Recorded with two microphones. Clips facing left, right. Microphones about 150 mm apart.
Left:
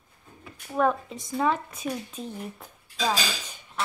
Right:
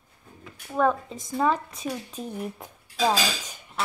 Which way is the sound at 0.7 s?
Centre (ahead or behind).